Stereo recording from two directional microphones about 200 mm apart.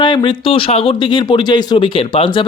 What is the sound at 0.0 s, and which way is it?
Speech, 25° left (ahead or behind).